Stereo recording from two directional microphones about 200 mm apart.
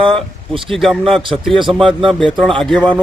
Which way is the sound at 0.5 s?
25° right (ahead or behind).